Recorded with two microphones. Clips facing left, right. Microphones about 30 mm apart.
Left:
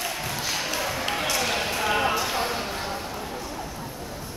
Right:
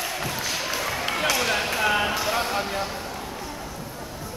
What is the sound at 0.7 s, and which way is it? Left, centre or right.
Basketball bounce, centre.